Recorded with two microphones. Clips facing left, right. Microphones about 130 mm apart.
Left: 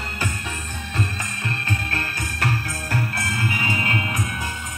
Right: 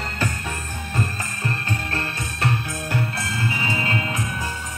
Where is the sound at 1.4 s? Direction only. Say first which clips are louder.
Right 1 dB; 30° right (ahead or behind).